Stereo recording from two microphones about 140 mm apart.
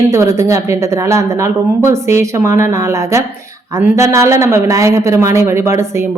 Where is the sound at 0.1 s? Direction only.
20° right (ahead or behind).